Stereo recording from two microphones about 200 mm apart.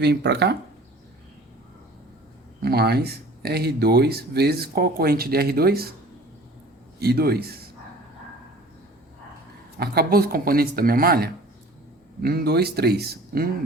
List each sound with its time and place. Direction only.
0.0 s speech: 55° right (ahead or behind)
2.6 s speech: 50° right (ahead or behind)
7.0 s speech: 50° right (ahead or behind)
9.7 s speech: 50° right (ahead or behind)